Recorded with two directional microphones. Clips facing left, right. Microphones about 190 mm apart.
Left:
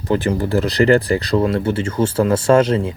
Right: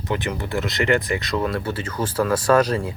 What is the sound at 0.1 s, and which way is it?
Speech, 35° left (ahead or behind).